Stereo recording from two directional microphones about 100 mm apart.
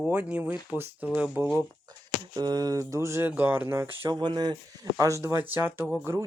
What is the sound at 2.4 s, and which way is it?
Speech, 40° right (ahead or behind).